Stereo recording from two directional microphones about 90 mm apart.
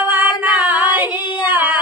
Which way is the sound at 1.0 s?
20° right (ahead or behind).